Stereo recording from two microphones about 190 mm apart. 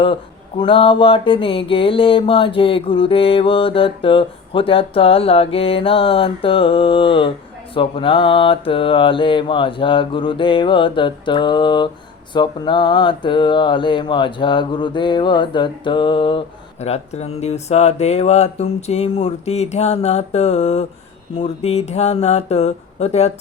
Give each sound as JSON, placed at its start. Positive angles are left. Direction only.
{"t": 0.6, "sound": "mantra", "side_deg": 30}
{"t": 16.8, "sound": "speech", "side_deg": 35}